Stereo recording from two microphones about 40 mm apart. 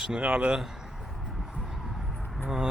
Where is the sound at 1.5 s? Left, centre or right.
Centre.